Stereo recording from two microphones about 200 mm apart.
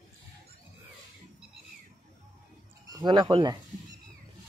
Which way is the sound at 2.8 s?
20° right (ahead or behind).